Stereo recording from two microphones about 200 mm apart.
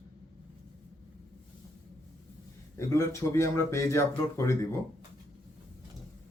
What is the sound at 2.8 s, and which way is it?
Speech, 15° left (ahead or behind).